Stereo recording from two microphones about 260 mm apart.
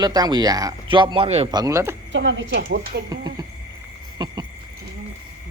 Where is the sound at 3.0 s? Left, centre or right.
Centre.